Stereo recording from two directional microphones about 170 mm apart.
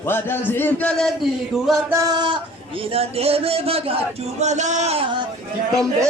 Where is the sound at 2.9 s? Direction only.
35° right (ahead or behind).